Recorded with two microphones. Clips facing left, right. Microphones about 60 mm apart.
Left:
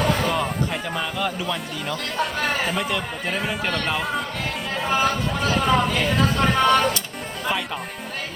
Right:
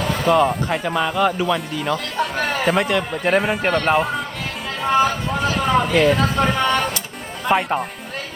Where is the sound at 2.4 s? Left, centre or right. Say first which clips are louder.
Right 8 dB; right.